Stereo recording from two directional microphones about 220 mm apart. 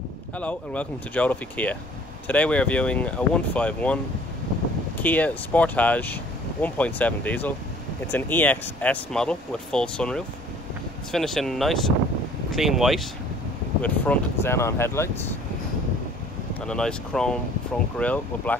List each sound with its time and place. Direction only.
0.4 s speech: 5° left (ahead or behind)
16.6 s speech: 5° left (ahead or behind)